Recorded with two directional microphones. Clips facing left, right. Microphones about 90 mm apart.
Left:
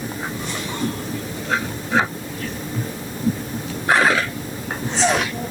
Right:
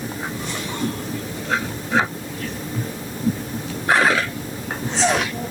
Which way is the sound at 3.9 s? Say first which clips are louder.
Even; 20° left (ahead or behind).